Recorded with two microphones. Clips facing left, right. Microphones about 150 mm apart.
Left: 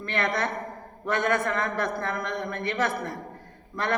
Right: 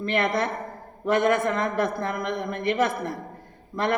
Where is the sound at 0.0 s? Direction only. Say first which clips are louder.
Right 3 dB; 20° right (ahead or behind).